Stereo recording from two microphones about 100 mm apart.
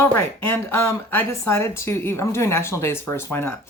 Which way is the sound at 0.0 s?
25° left (ahead or behind).